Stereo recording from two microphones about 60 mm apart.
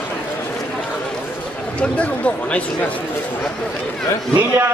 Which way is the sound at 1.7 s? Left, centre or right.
Left.